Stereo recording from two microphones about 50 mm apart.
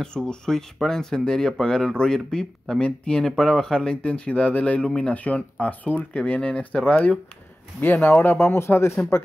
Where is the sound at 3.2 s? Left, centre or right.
Centre; by 6.9 s left.